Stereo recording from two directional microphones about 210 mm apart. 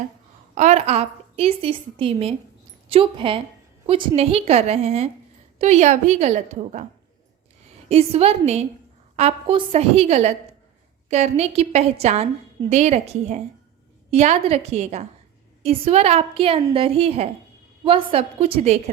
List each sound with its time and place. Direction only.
0.5 s a woman's voice: 35° right (ahead or behind)
7.9 s a woman's voice: 30° right (ahead or behind)